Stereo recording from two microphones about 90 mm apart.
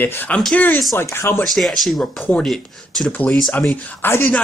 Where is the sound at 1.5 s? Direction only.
Centre (ahead or behind).